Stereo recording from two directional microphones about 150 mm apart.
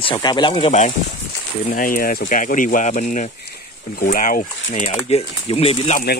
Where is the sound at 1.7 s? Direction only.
75° left (ahead or behind).